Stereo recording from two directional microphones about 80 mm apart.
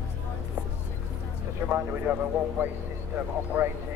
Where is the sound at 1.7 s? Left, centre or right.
Right.